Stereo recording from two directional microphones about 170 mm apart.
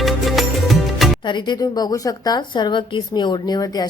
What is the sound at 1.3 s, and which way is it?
A woman's voice, 25° left (ahead or behind).